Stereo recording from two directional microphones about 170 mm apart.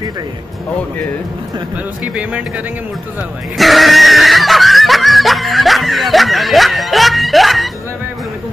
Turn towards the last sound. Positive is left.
turn(degrees=0)  # may be behind; listen again after turning